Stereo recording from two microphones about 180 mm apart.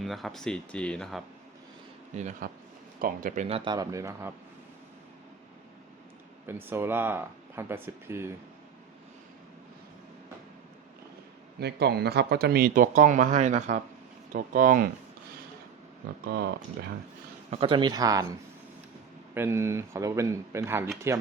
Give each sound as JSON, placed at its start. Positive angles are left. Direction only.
{"t": 0.0, "sound": "speech", "side_deg": 0}
{"t": 2.1, "sound": "speech", "side_deg": -40}
{"t": 3.5, "sound": "speech", "side_deg": -25}
{"t": 6.4, "sound": "speech", "side_deg": -10}
{"t": 11.6, "sound": "speech", "side_deg": -65}
{"t": 16.2, "sound": "speech", "side_deg": -65}
{"t": 17.5, "sound": "speech", "side_deg": -30}
{"t": 19.3, "sound": "speech", "side_deg": -15}